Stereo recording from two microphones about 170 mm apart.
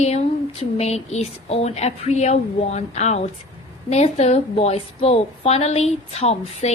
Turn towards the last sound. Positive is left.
turn(degrees=40)  # may be behind; listen again after turning